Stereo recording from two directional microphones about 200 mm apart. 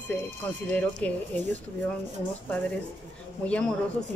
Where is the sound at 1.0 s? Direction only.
5° left (ahead or behind).